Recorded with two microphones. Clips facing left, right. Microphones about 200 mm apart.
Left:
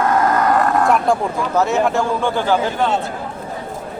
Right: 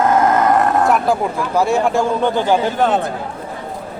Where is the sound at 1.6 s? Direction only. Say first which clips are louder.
Right 1 dB; 15° right (ahead or behind).